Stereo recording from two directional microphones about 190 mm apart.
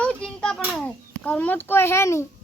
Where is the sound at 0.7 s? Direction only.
5° left (ahead or behind).